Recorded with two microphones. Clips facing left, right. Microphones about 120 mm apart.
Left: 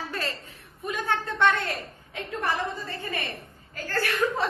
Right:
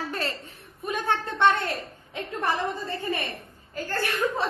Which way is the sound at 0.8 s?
25° right (ahead or behind).